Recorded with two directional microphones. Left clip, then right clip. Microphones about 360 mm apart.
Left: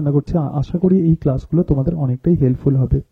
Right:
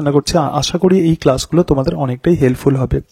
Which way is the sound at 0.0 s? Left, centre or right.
Centre.